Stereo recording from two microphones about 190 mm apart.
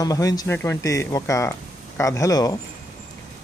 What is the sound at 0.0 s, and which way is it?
Speech, 20° left (ahead or behind).